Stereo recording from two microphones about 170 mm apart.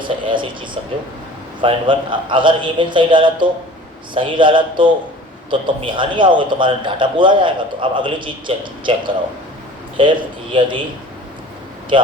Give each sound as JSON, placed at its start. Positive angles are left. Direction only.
{"t": 0.0, "sound": "a man's voice", "side_deg": -30}
{"t": 11.9, "sound": "speech", "side_deg": -30}